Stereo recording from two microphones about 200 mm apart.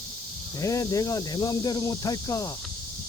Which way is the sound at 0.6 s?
15° left (ahead or behind).